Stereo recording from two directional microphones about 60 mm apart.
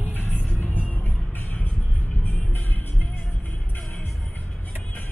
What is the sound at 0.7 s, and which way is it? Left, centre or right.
Music, left.